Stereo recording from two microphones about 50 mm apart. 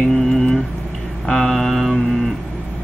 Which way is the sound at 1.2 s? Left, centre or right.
Centre.